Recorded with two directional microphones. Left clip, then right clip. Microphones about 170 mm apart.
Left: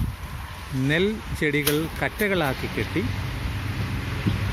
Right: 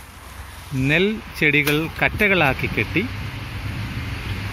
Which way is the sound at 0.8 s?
35° right (ahead or behind).